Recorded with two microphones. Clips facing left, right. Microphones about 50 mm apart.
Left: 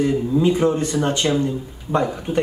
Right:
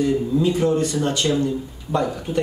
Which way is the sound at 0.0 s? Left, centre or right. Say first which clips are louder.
Left 1 dB; left.